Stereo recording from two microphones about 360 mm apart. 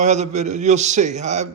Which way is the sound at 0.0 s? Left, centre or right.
Centre.